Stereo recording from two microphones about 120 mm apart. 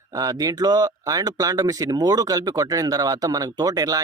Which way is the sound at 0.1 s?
30° right (ahead or behind).